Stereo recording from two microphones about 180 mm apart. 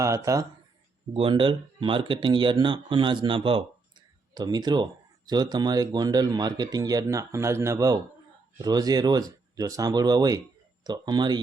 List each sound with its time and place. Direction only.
0.0 s speech: 15° right (ahead or behind)
1.1 s speech: 30° right (ahead or behind)